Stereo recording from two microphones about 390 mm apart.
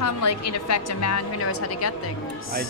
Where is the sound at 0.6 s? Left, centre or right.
Left.